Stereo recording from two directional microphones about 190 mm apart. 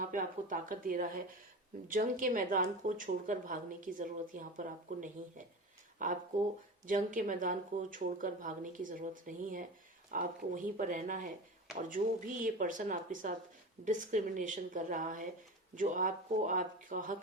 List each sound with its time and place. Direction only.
0.0 s speech: 45° right (ahead or behind)